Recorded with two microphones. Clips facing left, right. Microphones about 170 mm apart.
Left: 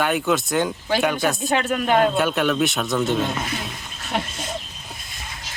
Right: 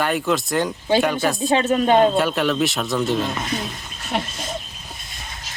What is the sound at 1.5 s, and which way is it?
Speech, 25° right (ahead or behind).